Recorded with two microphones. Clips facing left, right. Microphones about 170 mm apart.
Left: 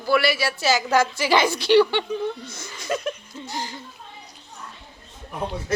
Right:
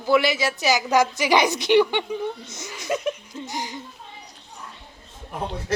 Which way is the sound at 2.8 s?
20° right (ahead or behind).